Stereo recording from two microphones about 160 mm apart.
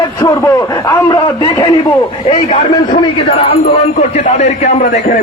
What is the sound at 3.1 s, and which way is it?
A man's voice, 35° left (ahead or behind).